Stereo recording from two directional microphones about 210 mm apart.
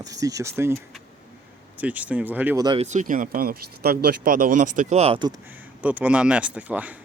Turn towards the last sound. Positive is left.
turn(degrees=-5)  # may be behind; listen again after turning